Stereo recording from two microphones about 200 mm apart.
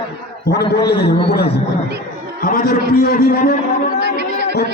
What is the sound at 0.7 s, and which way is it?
A man's voice, 55° left (ahead or behind).